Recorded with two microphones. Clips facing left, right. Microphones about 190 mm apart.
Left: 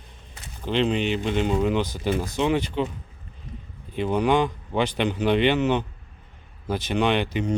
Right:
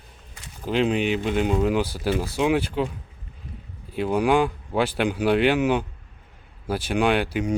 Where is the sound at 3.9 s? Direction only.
5° right (ahead or behind).